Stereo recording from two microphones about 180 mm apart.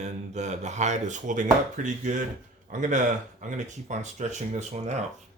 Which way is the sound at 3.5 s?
40° right (ahead or behind).